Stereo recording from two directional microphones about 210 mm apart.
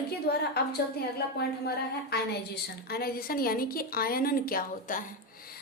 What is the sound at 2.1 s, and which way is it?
A woman's voice, 50° left (ahead or behind).